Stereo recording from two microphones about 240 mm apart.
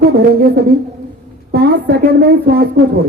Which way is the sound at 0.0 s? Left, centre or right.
Right.